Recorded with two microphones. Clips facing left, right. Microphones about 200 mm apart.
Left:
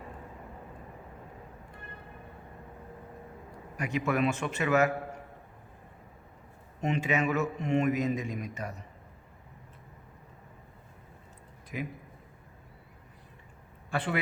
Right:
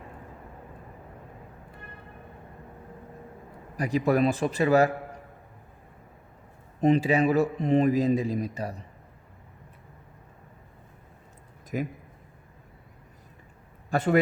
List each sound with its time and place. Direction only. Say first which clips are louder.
3.8 s a man's voice: right 6 dB; 35° right (ahead or behind)
6.8 s a man's voice: right 8 dB; 35° right (ahead or behind)
11.7 s a man's voice: right 6 dB; 45° right (ahead or behind)
13.9 s a man's voice: right 8 dB; 45° right (ahead or behind)